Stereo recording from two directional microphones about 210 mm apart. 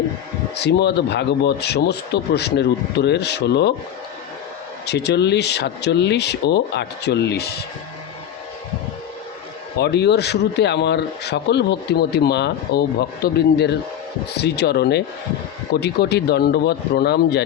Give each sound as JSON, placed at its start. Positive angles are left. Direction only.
{"t": 0.5, "sound": "a man's voice", "side_deg": 50}
{"t": 4.9, "sound": "a man's voice", "side_deg": 55}
{"t": 9.7, "sound": "a man's voice", "side_deg": 50}